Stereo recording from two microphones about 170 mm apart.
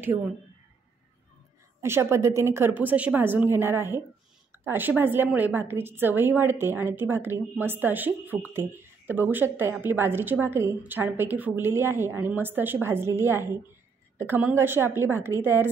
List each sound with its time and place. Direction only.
1.8 s a woman's voice: 15° right (ahead or behind)